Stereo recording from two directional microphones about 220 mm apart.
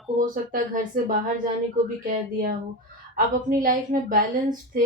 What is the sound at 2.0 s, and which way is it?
A woman's voice, 40° right (ahead or behind).